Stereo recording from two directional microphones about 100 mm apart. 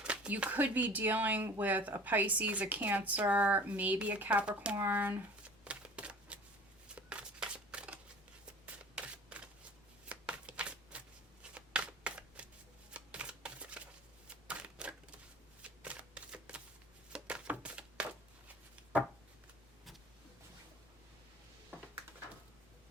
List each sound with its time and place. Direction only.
0.0 s speech: 10° right (ahead or behind)
5.6 s shuffling cards: 10° right (ahead or behind)
8.6 s a sound: 10° right (ahead or behind)
10.1 s shuffling cards: 10° right (ahead or behind)
14.4 s typewriter: 10° right (ahead or behind)
15.6 s shuffling cards: 10° right (ahead or behind)
17.1 s a sound: 10° right (ahead or behind)